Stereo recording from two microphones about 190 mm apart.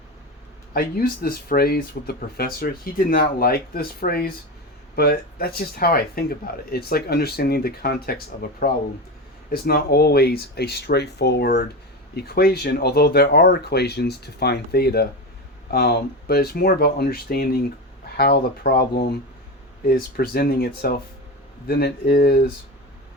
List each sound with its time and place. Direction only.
0.7 s speech: 50° left (ahead or behind)